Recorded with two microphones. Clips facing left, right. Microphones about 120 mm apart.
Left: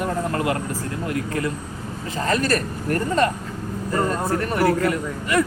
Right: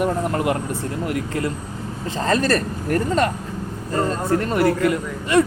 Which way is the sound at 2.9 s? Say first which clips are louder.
Right 1 dB; 20° right (ahead or behind).